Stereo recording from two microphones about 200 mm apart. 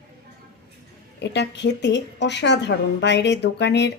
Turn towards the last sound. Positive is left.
turn(degrees=60)  # may be behind; listen again after turning